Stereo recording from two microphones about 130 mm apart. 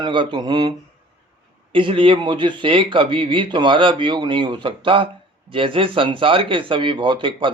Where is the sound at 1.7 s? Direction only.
40° right (ahead or behind).